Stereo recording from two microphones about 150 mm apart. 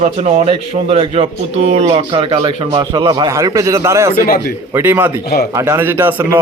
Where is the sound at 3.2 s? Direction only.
20° right (ahead or behind).